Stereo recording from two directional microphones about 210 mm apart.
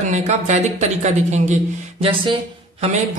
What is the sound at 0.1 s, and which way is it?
Speech, 35° right (ahead or behind).